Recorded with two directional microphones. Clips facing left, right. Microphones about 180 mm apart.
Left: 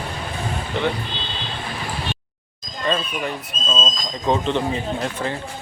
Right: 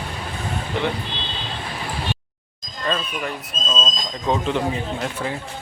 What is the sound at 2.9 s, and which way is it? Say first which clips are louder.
Speech: left 2 dB; centre (ahead or behind).